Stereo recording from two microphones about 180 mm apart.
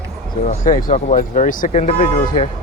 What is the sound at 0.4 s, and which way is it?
Speech, 45° left (ahead or behind).